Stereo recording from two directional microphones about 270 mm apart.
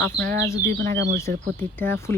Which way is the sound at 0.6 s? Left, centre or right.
Right.